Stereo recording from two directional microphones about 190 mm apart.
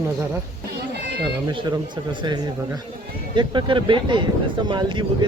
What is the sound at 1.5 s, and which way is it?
Speech, 20° right (ahead or behind).